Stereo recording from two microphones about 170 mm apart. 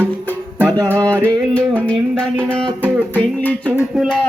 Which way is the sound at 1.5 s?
5° left (ahead or behind).